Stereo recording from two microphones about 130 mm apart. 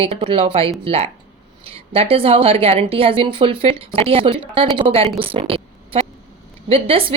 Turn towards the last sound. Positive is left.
turn(degrees=-45)  # may be behind; listen again after turning